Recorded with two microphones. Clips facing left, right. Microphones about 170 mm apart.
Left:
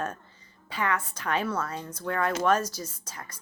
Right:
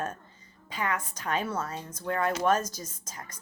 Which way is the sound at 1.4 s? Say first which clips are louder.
Left 2 dB; 25° right (ahead or behind).